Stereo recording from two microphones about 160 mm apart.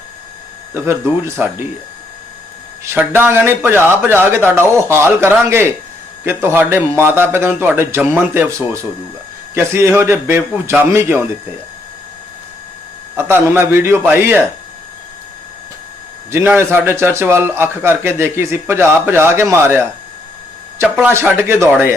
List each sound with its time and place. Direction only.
0.7 s a man's voice: 15° right (ahead or behind)
2.8 s a man's voice: 15° right (ahead or behind)
13.1 s a man's voice: 15° right (ahead or behind)
16.3 s a man's voice: 15° right (ahead or behind)